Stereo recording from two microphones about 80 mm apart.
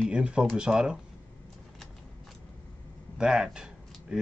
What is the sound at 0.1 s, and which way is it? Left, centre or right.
Speech, centre.